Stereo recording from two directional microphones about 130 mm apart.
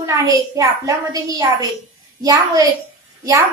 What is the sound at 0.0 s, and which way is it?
A woman's voice, 25° right (ahead or behind).